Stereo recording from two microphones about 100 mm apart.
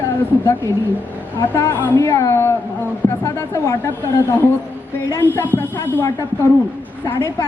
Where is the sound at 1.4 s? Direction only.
30° left (ahead or behind).